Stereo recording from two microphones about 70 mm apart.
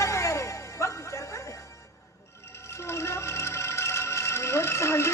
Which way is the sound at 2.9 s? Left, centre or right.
Left.